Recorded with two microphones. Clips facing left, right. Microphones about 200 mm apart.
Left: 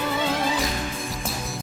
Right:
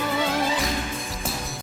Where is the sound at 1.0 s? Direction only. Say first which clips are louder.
Left 1 dB; centre (ahead or behind).